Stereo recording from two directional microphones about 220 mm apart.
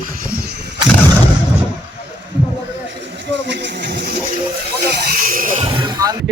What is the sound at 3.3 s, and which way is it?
Speech, 50° right (ahead or behind).